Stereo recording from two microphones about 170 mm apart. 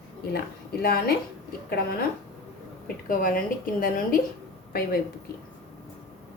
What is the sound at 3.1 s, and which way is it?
A woman's voice, 55° left (ahead or behind).